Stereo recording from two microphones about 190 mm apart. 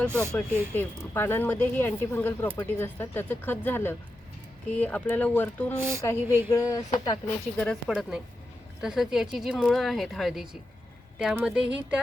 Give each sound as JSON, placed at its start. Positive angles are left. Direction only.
{"t": 0.1, "sound": "speech", "side_deg": -15}
{"t": 0.7, "sound": "speech", "side_deg": 10}
{"t": 5.7, "sound": "speech", "side_deg": -10}
{"t": 6.5, "sound": "speech", "side_deg": 15}
{"t": 7.6, "sound": "speech", "side_deg": 0}